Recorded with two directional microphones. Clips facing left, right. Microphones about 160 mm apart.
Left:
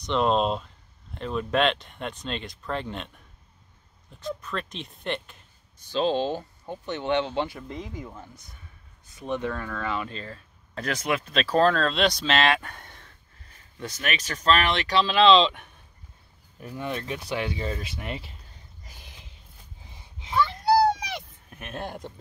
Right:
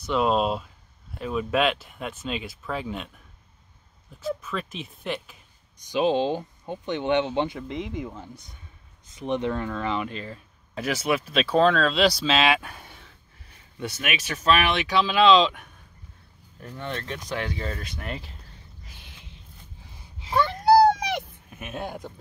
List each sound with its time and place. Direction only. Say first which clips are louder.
0.0 s speech: even; 5° right (ahead or behind)
4.2 s speech: right 2 dB; 5° right (ahead or behind)
5.8 s speech: right 2 dB; 15° right (ahead or behind)
16.5 s speech: left 2 dB; 10° left (ahead or behind)
20.3 s a sound: right 4 dB; 55° right (ahead or behind)
21.5 s speech: left 2 dB; 5° right (ahead or behind)